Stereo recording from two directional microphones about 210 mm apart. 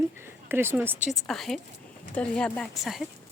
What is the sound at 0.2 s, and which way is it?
Speech, 10° right (ahead or behind).